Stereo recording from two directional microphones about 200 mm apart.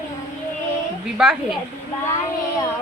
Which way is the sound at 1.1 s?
5° right (ahead or behind).